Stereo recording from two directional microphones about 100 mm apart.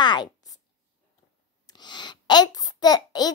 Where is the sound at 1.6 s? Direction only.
45° left (ahead or behind).